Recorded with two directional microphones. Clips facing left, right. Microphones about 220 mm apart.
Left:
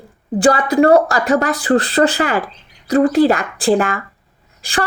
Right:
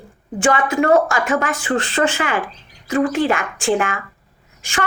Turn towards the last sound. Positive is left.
turn(degrees=35)  # may be behind; listen again after turning